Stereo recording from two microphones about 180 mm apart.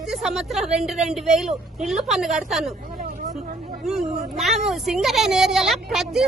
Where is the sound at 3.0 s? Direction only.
50° right (ahead or behind).